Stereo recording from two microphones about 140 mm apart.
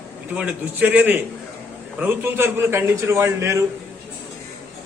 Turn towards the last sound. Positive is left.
turn(degrees=-20)  # may be behind; listen again after turning